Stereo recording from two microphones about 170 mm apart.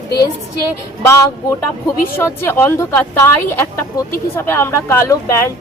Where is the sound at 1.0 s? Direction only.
15° left (ahead or behind).